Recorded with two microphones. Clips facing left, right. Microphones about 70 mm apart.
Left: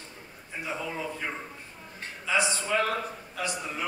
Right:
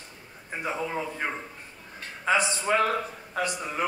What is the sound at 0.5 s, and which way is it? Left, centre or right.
Speech, right.